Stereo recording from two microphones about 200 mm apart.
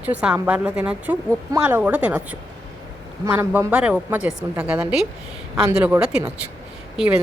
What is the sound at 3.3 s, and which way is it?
Speech, 10° right (ahead or behind).